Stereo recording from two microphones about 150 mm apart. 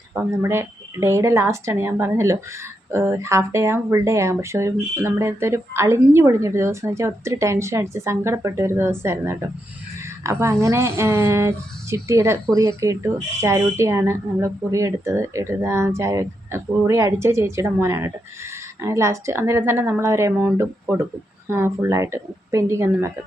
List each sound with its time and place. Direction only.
0.1 s a woman's voice: 15° right (ahead or behind)